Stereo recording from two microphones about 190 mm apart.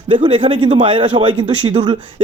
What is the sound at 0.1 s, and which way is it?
Speech, 25° right (ahead or behind).